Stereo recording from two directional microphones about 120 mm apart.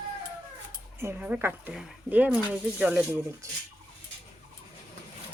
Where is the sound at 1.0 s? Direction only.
15° right (ahead or behind).